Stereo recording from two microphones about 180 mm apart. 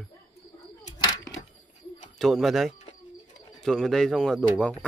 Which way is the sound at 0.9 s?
20° left (ahead or behind).